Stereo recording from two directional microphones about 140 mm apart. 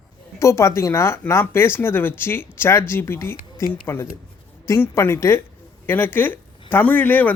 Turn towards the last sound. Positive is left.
turn(degrees=15)  # may be behind; listen again after turning